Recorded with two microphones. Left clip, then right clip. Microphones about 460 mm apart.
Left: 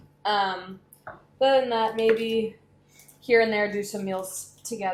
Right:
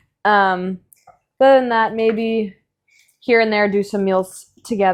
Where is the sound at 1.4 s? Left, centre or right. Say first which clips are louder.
Right 9 dB; right.